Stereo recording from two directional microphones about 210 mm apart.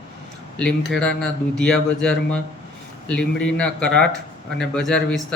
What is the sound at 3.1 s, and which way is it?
Speech, 5° left (ahead or behind).